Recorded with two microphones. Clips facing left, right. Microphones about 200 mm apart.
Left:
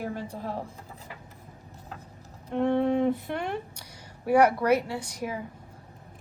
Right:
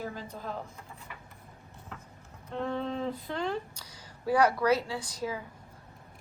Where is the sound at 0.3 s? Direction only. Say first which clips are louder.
Left 4 dB; 30° left (ahead or behind).